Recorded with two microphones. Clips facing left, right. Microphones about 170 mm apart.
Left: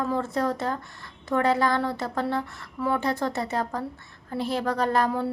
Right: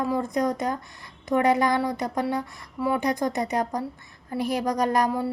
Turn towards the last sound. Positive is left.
turn(degrees=-10)  # may be behind; listen again after turning